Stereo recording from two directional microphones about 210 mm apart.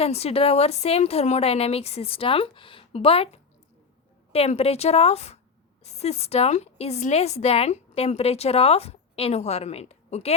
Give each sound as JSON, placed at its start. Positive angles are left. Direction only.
{"t": 0.0, "sound": "a woman's voice", "side_deg": 30}